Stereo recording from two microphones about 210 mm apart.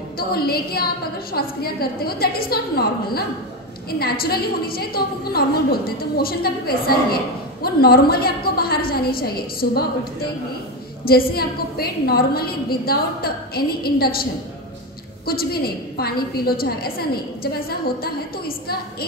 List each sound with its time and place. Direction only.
0.3 s a woman's voice: 45° left (ahead or behind)
11.1 s a woman's voice: 45° left (ahead or behind)
15.2 s a woman's voice: 45° left (ahead or behind)